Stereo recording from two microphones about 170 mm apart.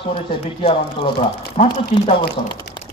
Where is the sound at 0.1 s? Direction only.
30° left (ahead or behind).